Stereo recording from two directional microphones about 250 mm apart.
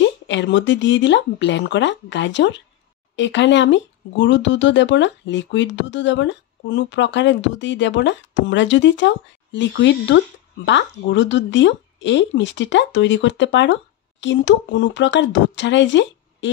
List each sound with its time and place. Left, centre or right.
0.3 s speech: left